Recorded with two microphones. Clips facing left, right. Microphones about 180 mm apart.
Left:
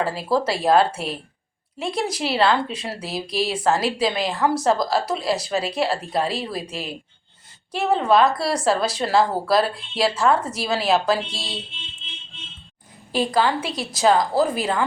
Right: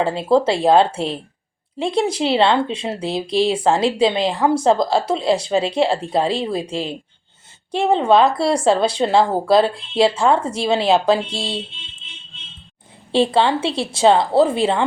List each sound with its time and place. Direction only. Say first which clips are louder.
0.0 s speech: right 6 dB; 25° right (ahead or behind)
13.1 s speech: right 4 dB; 30° right (ahead or behind)